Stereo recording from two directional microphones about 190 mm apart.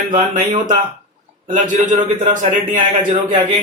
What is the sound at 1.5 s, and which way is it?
A man's voice, 40° right (ahead or behind).